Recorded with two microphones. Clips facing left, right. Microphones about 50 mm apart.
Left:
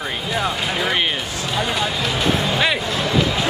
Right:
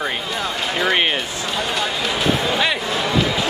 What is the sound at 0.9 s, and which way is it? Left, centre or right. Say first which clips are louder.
Speech: right 2 dB; centre.